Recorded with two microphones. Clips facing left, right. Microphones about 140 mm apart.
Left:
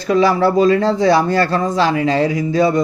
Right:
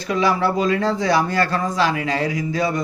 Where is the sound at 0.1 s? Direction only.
35° left (ahead or behind).